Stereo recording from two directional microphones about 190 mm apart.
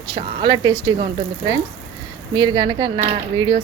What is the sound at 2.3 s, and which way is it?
Speech, 25° right (ahead or behind).